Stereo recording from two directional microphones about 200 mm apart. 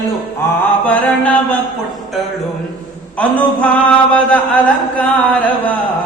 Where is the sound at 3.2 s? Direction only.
5° left (ahead or behind).